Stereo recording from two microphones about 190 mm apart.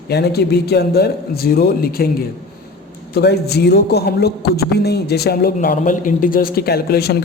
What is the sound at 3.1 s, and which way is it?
Speech, 55° left (ahead or behind).